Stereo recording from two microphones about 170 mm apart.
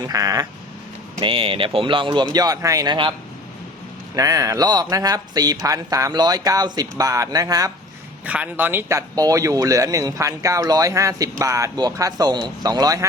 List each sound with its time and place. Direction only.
0.1 s speech: 20° right (ahead or behind)
1.2 s speech: 35° right (ahead or behind)
4.1 s speech: 20° right (ahead or behind)
8.2 s speech: 10° right (ahead or behind)